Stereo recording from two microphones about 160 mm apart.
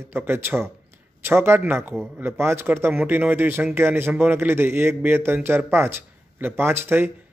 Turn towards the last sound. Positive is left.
turn(degrees=-15)  # may be behind; listen again after turning